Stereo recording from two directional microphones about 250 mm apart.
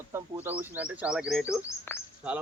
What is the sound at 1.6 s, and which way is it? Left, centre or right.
Speech, centre.